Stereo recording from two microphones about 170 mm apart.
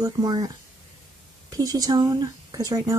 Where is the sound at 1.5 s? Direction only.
20° right (ahead or behind).